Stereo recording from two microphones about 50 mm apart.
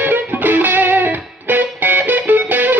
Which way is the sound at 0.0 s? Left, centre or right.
Right.